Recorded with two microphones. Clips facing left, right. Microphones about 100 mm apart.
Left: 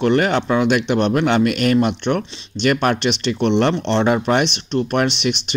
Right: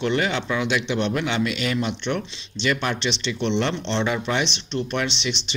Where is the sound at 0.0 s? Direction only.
50° left (ahead or behind).